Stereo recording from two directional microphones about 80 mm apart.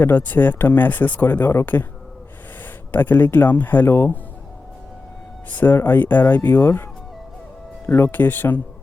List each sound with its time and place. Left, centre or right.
0.0 s speech: left
2.9 s speech: left
5.5 s speech: left
7.9 s speech: left